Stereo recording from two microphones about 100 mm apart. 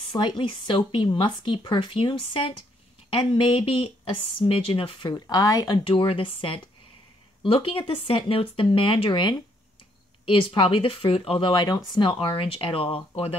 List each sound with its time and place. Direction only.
0.1 s speech: 55° left (ahead or behind)
5.2 s speech: 40° left (ahead or behind)
5.9 s speech: 65° left (ahead or behind)